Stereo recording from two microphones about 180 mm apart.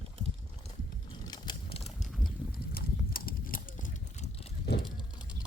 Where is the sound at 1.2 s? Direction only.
25° left (ahead or behind).